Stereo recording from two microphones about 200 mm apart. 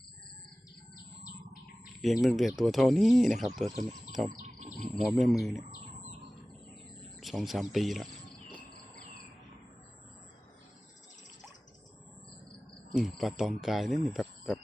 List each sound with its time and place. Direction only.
1.8 s speech: centre (ahead or behind)
4.4 s bird: 35° right (ahead or behind)
4.9 s speech: centre (ahead or behind)
7.2 s speech: centre (ahead or behind)
12.9 s speech: centre (ahead or behind)